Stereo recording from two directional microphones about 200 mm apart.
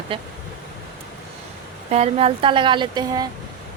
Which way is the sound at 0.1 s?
25° right (ahead or behind).